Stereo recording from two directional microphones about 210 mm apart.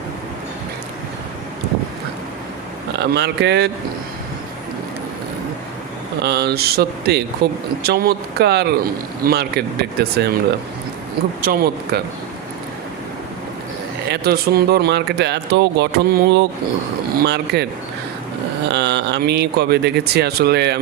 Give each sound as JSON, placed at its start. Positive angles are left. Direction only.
{"t": 2.9, "sound": "speech", "side_deg": -55}
{"t": 6.2, "sound": "speech", "side_deg": -50}
{"t": 11.4, "sound": "speech", "side_deg": -50}
{"t": 14.1, "sound": "speech", "side_deg": -50}
{"t": 18.7, "sound": "speech", "side_deg": -55}